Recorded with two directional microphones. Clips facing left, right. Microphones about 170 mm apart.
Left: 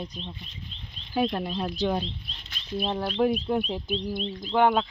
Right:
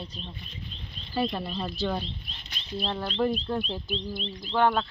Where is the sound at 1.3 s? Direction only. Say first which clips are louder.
Left 3 dB; 10° left (ahead or behind).